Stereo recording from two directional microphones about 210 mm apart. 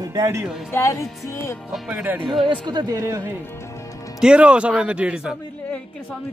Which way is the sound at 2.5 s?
20° right (ahead or behind).